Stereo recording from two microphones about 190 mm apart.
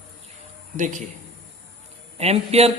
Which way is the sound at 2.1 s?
35° right (ahead or behind).